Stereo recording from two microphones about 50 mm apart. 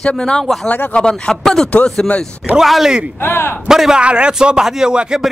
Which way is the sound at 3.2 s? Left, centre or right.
Left.